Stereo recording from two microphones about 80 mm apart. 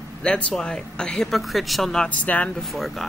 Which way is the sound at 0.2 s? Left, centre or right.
Centre.